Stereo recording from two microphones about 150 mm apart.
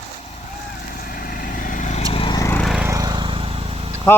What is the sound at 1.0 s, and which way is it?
Vehicle, 75° left (ahead or behind).